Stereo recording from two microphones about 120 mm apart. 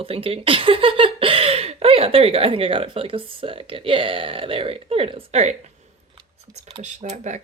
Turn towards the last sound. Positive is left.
turn(degrees=-85)